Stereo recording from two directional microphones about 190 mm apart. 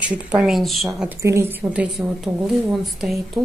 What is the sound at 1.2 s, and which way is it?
A woman's voice, 15° right (ahead or behind).